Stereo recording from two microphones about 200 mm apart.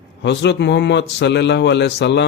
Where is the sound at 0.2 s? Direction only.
60° left (ahead or behind).